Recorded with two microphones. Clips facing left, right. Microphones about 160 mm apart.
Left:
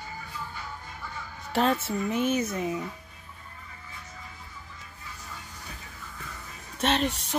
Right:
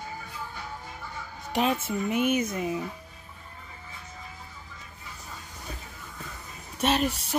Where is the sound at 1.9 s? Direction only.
10° right (ahead or behind).